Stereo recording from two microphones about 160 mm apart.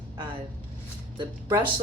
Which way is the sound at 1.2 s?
30° right (ahead or behind).